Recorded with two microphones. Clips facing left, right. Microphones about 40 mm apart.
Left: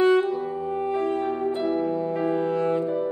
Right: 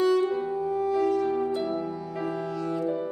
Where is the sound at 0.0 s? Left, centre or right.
Left.